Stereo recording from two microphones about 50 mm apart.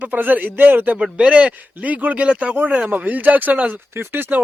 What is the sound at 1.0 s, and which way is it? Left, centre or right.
A man's voice, right.